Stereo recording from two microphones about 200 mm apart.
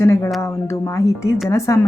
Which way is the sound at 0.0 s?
15° left (ahead or behind).